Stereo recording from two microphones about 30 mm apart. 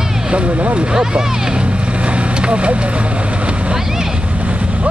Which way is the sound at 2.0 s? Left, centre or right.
Right.